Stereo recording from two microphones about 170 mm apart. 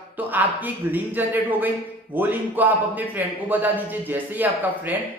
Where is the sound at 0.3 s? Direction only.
10° right (ahead or behind).